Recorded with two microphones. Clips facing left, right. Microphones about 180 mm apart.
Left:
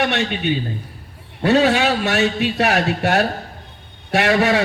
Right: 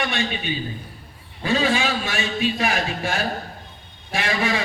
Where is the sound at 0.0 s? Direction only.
70° left (ahead or behind).